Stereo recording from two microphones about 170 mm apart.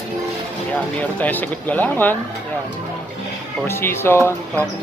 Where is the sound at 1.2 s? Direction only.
10° left (ahead or behind).